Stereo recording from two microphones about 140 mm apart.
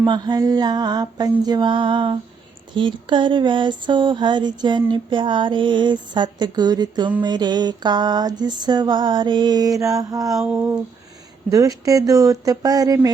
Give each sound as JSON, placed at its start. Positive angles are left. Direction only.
{"t": 0.0, "sound": "music", "side_deg": -30}
{"t": 2.7, "sound": "a sound", "side_deg": -35}
{"t": 11.5, "sound": "music", "side_deg": -25}